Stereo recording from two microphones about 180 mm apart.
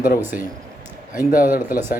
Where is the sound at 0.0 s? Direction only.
50° left (ahead or behind).